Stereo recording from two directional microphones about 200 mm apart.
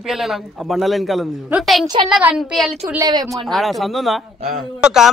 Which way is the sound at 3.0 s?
20° right (ahead or behind).